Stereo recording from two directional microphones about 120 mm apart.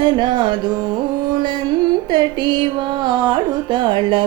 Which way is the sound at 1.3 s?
40° right (ahead or behind).